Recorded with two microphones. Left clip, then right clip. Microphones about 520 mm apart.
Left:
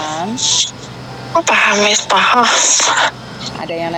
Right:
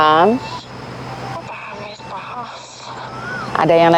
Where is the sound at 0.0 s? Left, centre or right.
Right.